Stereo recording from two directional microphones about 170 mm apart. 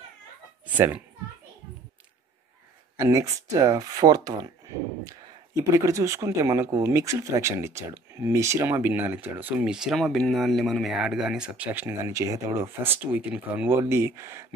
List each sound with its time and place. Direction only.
0.7 s speech: 10° right (ahead or behind)
3.0 s speech: 20° right (ahead or behind)